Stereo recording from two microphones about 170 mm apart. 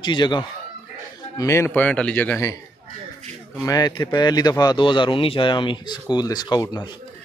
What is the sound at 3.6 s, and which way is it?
Speech, 20° left (ahead or behind).